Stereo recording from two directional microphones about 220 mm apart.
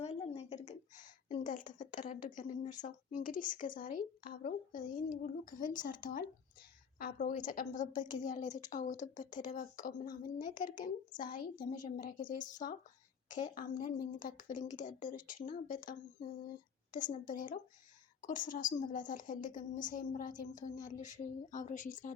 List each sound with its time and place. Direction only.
0.0 s a sound: 30° left (ahead or behind)
1.3 s a woman's voice: 35° left (ahead or behind)
10.1 s a woman's voice: 20° left (ahead or behind)
10.4 s a woman's voice: 35° left (ahead or behind)